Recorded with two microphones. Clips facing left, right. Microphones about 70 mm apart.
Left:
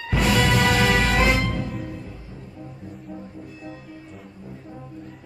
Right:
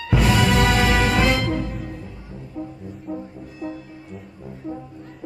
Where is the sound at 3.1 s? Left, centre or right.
Right.